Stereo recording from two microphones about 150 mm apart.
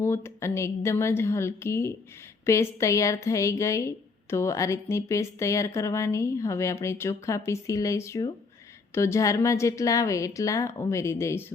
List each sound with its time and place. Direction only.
0.0 s a woman's voice: 15° left (ahead or behind)